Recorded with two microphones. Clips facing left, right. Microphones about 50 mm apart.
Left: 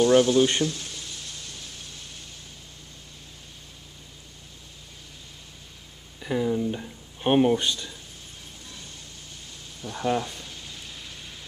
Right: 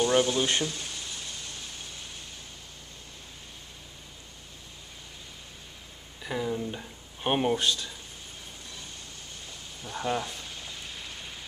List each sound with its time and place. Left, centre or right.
0.0 s speech: centre
6.1 s speech: centre
9.8 s a sound: centre